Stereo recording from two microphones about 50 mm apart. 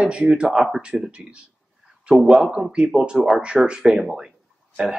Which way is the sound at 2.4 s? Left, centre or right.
Centre.